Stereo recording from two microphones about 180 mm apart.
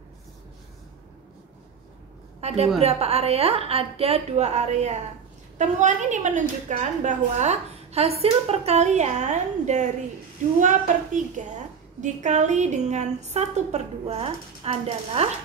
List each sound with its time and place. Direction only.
2.4 s a woman's voice: 35° right (ahead or behind)